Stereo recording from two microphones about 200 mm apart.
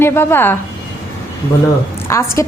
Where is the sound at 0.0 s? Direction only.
10° left (ahead or behind).